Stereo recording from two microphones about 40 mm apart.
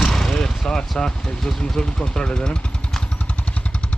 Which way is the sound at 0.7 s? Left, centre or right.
Centre.